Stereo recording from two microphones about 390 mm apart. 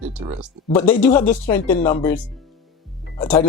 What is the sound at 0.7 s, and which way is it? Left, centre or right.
Speech, centre.